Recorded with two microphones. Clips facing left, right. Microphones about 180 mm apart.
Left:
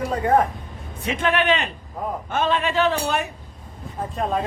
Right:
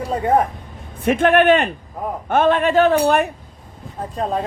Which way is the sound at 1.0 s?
50° right (ahead or behind).